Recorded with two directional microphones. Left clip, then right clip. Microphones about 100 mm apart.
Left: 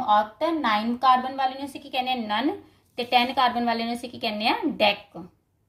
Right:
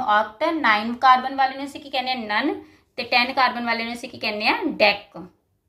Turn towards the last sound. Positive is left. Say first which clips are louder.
# right 4 dB
turn(degrees=35)  # may be behind; listen again after turning